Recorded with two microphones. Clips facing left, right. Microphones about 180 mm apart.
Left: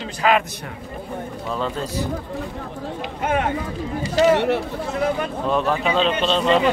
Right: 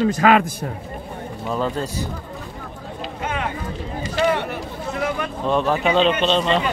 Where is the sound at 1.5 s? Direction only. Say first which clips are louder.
Right 2 dB; centre (ahead or behind).